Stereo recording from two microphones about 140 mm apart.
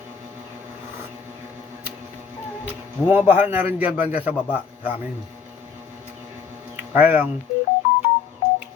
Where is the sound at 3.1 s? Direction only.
15° right (ahead or behind).